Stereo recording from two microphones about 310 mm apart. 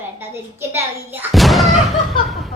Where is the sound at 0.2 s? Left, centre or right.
Centre.